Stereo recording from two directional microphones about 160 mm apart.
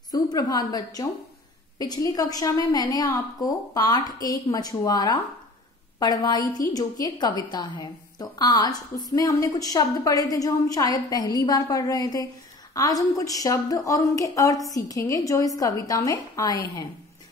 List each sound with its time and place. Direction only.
0.1 s a woman's voice: 25° left (ahead or behind)